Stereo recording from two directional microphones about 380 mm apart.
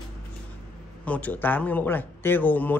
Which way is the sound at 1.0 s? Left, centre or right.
Centre.